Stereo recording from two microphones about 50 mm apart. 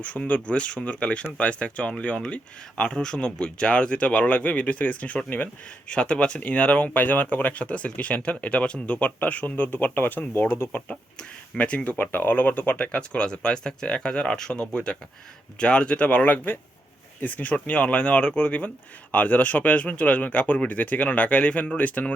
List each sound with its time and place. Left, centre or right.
0.0 s speech: left
5.9 s speech: left